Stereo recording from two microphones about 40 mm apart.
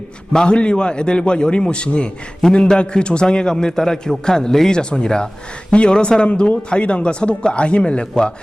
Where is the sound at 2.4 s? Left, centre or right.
Centre.